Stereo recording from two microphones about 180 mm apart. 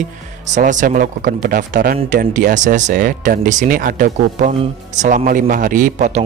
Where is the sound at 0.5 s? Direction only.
45° right (ahead or behind).